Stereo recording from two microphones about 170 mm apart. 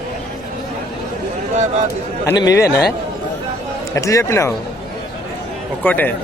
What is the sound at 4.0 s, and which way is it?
Speech, 20° left (ahead or behind).